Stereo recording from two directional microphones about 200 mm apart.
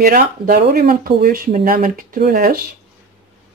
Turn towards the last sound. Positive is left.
turn(degrees=-50)  # may be behind; listen again after turning